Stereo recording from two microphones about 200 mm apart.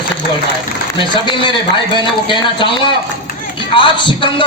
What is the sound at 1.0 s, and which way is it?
Speech, 25° left (ahead or behind).